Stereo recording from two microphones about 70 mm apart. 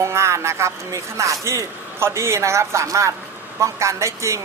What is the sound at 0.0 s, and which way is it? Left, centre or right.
Speech, right.